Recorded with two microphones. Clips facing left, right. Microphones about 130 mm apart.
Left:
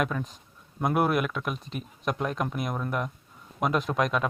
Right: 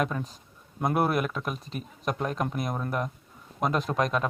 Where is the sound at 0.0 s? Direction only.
35° right (ahead or behind).